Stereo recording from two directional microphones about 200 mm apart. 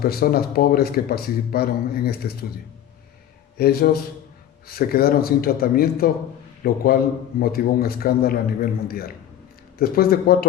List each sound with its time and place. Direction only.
0.0 s a man's voice: 50° left (ahead or behind)
3.6 s a man's voice: 50° left (ahead or behind)